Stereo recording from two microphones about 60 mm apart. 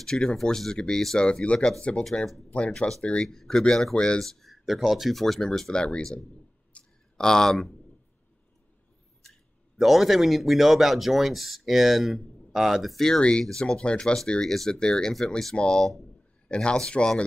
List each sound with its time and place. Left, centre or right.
0.0 s speech: centre
3.3 s speech: centre
6.7 s a sound: centre
9.2 s speech: centre